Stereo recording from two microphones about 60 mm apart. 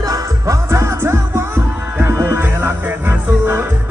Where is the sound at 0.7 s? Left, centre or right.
Right.